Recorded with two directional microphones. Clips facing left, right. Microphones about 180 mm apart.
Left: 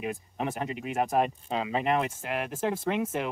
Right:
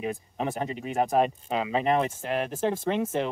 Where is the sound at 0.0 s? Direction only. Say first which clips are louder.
Right 2 dB; 30° right (ahead or behind).